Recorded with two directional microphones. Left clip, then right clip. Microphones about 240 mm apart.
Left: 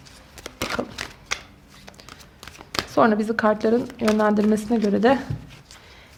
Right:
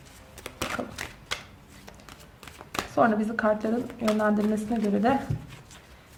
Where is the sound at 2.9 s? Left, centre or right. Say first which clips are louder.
Left 5 dB; left.